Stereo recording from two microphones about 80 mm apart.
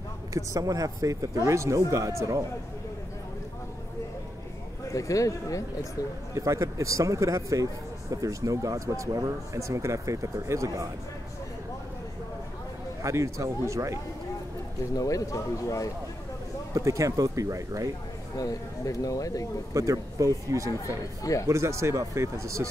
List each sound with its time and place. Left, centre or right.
0.3 s speech: right
4.9 s speech: left
6.3 s speech: right
13.0 s speech: right
15.0 s speech: left
16.7 s speech: right
18.4 s speech: left
19.7 s speech: right
20.8 s speech: left
21.5 s speech: right